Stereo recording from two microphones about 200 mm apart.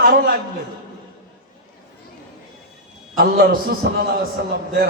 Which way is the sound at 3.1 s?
50° right (ahead or behind).